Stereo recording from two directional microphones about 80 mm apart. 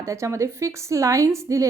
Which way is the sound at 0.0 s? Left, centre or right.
Right.